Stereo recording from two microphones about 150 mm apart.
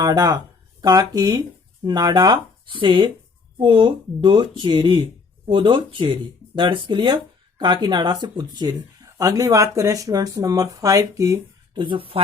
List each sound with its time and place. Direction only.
0.0 s speech: 25° right (ahead or behind)